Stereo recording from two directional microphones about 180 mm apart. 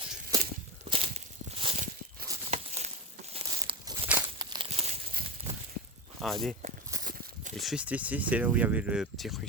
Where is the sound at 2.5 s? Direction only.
40° right (ahead or behind).